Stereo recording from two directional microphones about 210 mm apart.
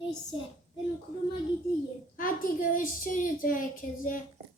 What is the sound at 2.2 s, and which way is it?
A woman's voice, 40° left (ahead or behind).